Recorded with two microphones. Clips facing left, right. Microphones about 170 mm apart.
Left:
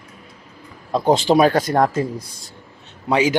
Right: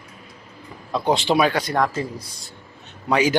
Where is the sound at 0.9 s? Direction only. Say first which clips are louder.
Left 4 dB; 45° left (ahead or behind).